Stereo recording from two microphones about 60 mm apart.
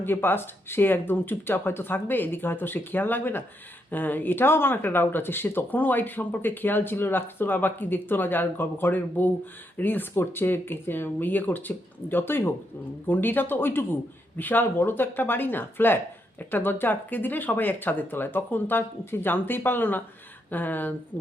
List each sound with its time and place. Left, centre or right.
0.0 s speech: left